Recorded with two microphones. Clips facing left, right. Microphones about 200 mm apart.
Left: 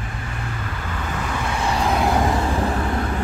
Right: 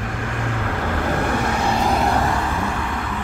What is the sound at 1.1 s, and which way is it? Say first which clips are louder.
Vehicle: right 5 dB; 60° right (ahead or behind).